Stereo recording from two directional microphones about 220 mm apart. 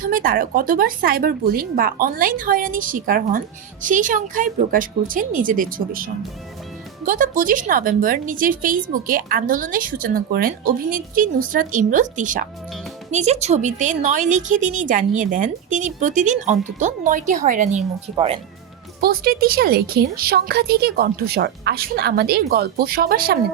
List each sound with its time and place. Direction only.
0.0 s a woman's voice: 40° right (ahead or behind)
18.9 s a woman's voice: 45° right (ahead or behind)